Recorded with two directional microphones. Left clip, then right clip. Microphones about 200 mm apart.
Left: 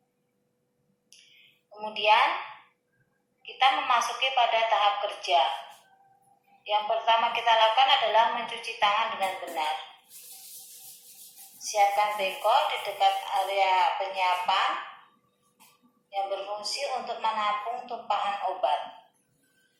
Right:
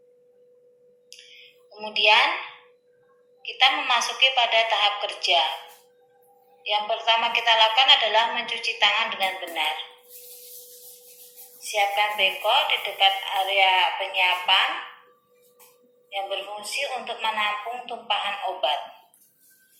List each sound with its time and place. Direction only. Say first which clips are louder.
1.7 s a woman's voice: right 4 dB; 30° right (ahead or behind)
3.4 s a woman's voice: right 3 dB; 30° right (ahead or behind)
6.7 s a woman's voice: right 2 dB; 30° right (ahead or behind)
11.6 s a woman's voice: right 1 dB; 25° right (ahead or behind)
16.6 s a woman's voice: right 3 dB; 25° right (ahead or behind)